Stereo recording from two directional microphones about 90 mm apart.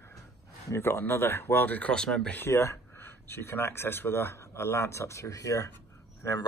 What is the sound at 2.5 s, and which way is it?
Speech, 30° left (ahead or behind).